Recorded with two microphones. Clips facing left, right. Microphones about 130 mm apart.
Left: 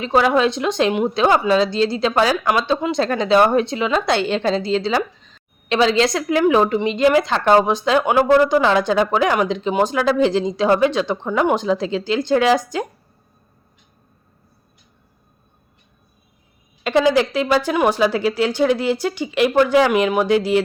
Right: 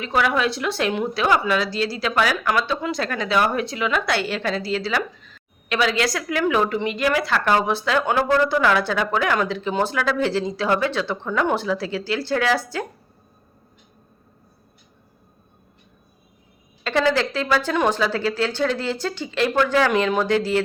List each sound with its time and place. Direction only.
0.0 s a woman's voice: 25° left (ahead or behind)
16.8 s speech: 15° left (ahead or behind)